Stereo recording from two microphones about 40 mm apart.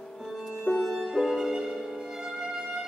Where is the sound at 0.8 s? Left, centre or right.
Centre.